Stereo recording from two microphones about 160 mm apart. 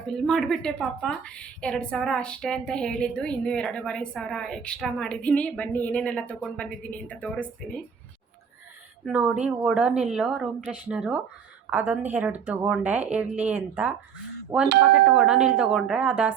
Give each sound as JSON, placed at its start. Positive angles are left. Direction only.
{"t": 0.3, "sound": "a woman's voice", "side_deg": 0}
{"t": 9.0, "sound": "a woman's voice", "side_deg": -5}